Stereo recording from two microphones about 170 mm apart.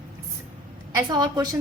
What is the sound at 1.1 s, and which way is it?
Speech, 25° right (ahead or behind).